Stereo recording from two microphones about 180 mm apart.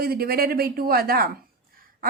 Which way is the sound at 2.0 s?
50° right (ahead or behind).